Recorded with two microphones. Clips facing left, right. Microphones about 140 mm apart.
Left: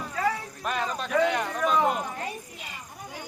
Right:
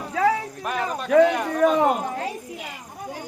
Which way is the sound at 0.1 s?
80° right.